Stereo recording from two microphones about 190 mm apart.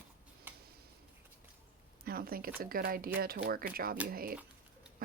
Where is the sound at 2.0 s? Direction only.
50° right (ahead or behind).